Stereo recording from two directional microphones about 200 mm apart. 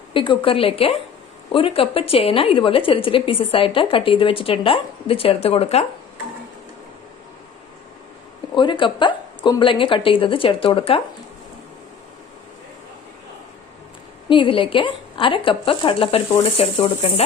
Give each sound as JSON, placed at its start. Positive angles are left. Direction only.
{"t": 0.1, "sound": "a woman's voice", "side_deg": 25}
{"t": 8.5, "sound": "a woman's voice", "side_deg": 25}
{"t": 14.3, "sound": "a woman's voice", "side_deg": 25}